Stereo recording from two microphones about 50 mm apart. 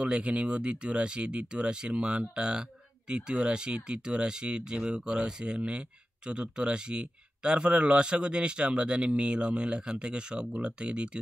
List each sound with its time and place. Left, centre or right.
0.0 s speech: right